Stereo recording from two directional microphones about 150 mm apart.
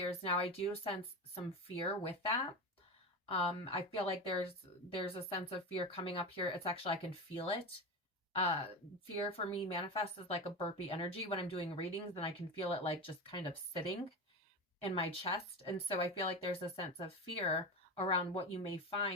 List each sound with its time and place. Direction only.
0.0 s a woman's voice: 40° left (ahead or behind)